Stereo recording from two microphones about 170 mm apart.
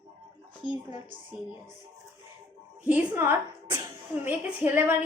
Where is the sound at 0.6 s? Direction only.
30° left (ahead or behind).